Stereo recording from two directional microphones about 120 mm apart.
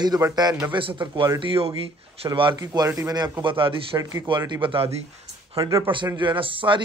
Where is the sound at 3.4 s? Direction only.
45° right (ahead or behind).